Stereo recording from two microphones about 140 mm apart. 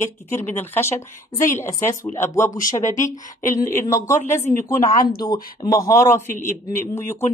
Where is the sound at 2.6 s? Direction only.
60° left (ahead or behind).